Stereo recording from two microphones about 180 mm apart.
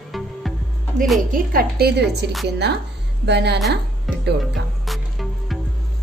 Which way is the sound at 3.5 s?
Centre (ahead or behind).